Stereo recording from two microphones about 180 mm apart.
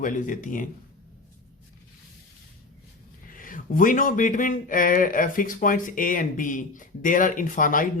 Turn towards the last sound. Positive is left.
turn(degrees=50)  # may be behind; listen again after turning